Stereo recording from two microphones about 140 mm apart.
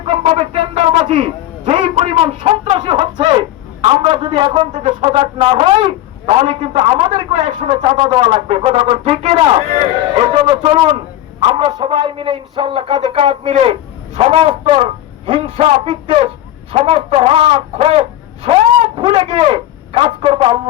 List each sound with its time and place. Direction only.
0.1 s a sound: 40° right (ahead or behind)
4.9 s speech: 45° right (ahead or behind)
7.9 s a man's voice: 30° right (ahead or behind)